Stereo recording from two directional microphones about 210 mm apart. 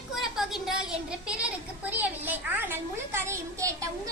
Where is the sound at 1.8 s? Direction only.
10° right (ahead or behind).